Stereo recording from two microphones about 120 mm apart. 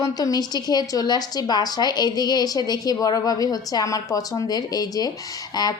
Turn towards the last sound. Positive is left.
turn(degrees=35)  # may be behind; listen again after turning